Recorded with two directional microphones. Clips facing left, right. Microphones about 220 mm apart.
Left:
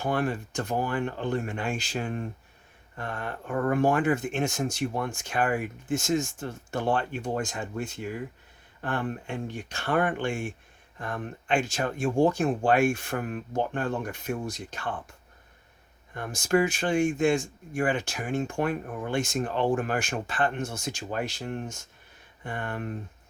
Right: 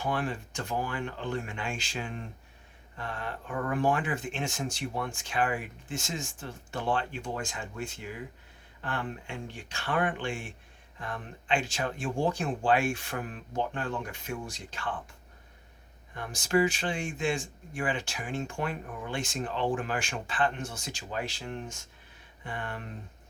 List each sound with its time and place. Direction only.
0.0 s speech: 45° left (ahead or behind)
8.8 s speech: 50° left (ahead or behind)
16.1 s speech: 50° left (ahead or behind)